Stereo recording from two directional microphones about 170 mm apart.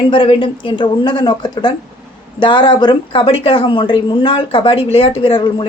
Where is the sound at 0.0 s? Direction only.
30° left (ahead or behind).